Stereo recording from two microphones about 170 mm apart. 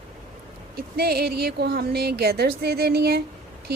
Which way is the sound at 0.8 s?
65° right (ahead or behind).